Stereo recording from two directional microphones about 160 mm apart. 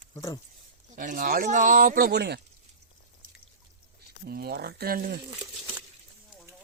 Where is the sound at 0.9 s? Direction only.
55° right (ahead or behind); by 2.4 s 90° right.